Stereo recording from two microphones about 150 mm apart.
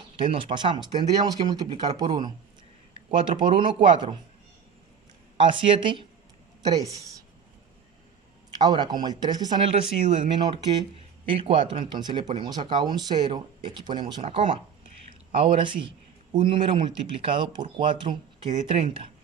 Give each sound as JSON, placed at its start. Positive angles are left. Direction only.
{"t": 0.2, "sound": "speech", "side_deg": -35}
{"t": 5.4, "sound": "a woman's voice", "side_deg": -35}
{"t": 8.5, "sound": "speech", "side_deg": -30}